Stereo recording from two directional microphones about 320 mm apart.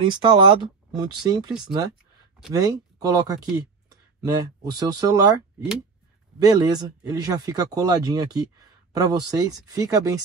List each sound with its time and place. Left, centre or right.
0.0 s speech: centre
6.4 s speech: centre